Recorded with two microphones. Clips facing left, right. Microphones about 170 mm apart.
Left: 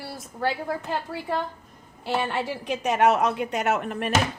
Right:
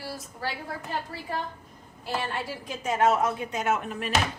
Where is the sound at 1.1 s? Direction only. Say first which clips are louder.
Left 6 dB; 65° left (ahead or behind).